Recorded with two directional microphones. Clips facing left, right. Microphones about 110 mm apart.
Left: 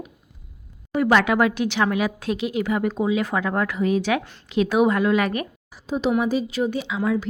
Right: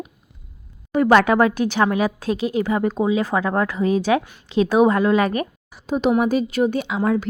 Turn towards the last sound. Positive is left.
turn(degrees=-55)  # may be behind; listen again after turning